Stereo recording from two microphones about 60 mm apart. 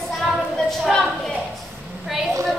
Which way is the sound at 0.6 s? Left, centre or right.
Centre.